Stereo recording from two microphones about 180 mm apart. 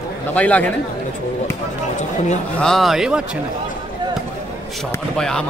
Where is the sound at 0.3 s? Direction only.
10° left (ahead or behind).